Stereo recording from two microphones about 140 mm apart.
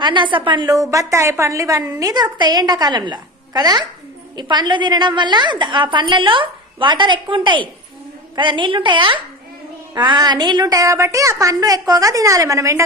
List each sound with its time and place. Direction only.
0.0 s a woman's voice: 35° right (ahead or behind)